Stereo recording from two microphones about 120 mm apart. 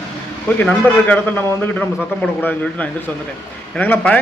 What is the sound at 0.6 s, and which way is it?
A man's voice, 10° left (ahead or behind).